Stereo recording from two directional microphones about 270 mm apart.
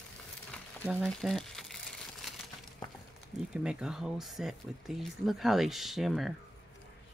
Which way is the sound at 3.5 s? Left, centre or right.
Centre.